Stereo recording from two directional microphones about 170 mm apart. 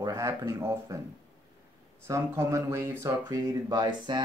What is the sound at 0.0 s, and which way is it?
Speech, 15° right (ahead or behind).